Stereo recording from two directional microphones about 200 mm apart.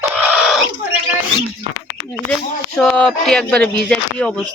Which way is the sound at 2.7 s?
5° left (ahead or behind).